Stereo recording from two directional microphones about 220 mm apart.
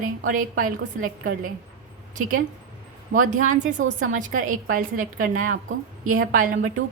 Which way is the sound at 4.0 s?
35° right (ahead or behind).